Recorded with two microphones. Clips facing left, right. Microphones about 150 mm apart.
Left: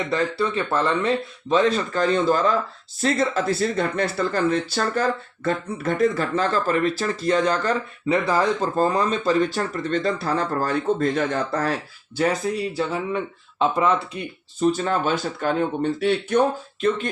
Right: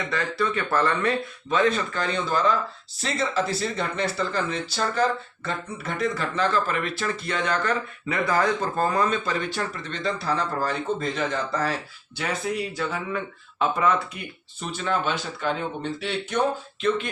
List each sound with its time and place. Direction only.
0.1 s speech: 30° left (ahead or behind); by 11.7 s 50° left (ahead or behind)
12.1 s speech: 40° left (ahead or behind)
14.7 s speech: 40° left (ahead or behind)